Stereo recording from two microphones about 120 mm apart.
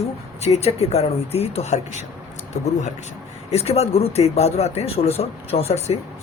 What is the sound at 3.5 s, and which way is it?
Speech, 60° left (ahead or behind).